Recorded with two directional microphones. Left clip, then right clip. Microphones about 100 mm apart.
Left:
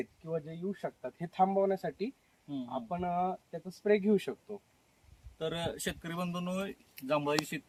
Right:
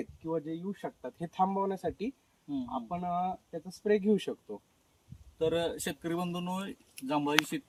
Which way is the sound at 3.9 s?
10° left (ahead or behind).